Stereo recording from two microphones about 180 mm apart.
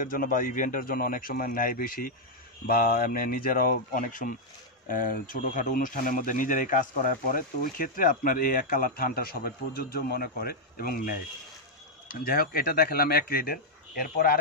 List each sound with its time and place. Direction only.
0.0 s speech: 50° left (ahead or behind)